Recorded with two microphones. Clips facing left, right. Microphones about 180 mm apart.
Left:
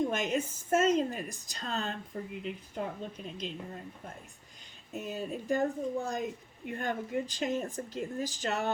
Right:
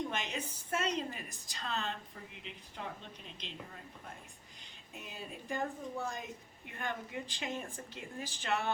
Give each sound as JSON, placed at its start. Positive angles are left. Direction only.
{"t": 0.1, "sound": "a woman's voice", "side_deg": 45}
{"t": 4.9, "sound": "a woman's voice", "side_deg": 45}